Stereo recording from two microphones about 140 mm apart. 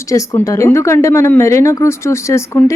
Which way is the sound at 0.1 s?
25° left (ahead or behind).